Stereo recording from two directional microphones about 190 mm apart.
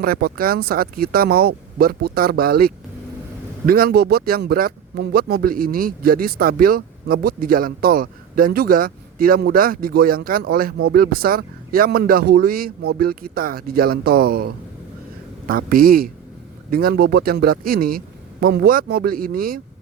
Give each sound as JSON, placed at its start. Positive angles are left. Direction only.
{"t": 0.0, "sound": "speech", "side_deg": -55}